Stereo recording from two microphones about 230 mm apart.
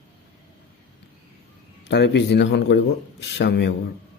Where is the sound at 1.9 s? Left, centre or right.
Left.